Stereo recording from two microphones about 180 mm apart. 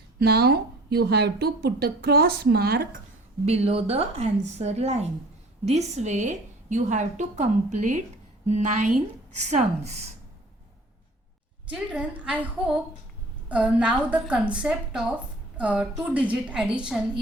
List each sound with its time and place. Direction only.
0.2 s a woman's voice: 60° right (ahead or behind)
3.4 s a woman's voice: 35° right (ahead or behind)
11.7 s a woman's voice: 5° right (ahead or behind)